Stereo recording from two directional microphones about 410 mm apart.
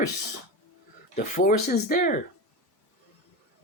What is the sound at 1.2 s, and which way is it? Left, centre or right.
Speech, centre.